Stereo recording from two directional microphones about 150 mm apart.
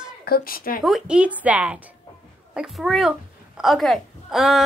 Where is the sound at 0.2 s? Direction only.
80° left.